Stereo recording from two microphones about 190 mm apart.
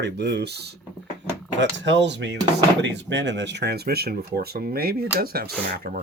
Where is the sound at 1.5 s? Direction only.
70° right (ahead or behind).